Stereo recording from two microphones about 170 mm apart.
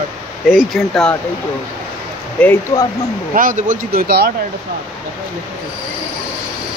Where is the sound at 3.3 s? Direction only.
50° right (ahead or behind).